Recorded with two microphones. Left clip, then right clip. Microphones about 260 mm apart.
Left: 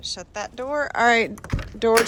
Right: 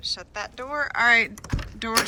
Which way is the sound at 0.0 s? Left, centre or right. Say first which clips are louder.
Even; centre.